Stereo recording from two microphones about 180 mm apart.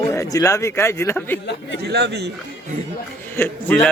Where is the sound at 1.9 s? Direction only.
65° right (ahead or behind).